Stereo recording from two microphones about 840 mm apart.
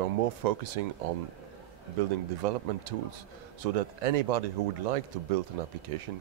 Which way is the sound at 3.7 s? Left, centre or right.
Right.